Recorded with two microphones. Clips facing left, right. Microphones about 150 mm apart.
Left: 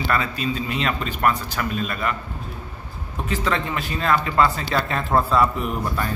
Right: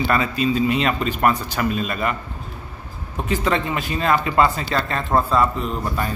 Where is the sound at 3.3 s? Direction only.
20° right (ahead or behind).